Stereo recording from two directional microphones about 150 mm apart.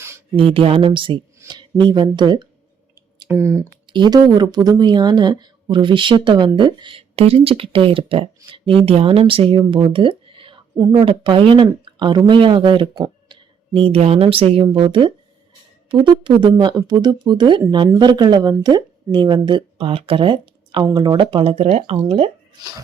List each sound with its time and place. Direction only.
0.3 s a woman's voice: 40° right (ahead or behind)
3.2 s speech: 15° right (ahead or behind)
3.8 s a woman's voice: 30° right (ahead or behind)